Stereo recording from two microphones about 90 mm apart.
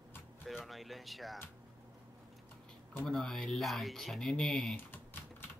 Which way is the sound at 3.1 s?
5° left (ahead or behind).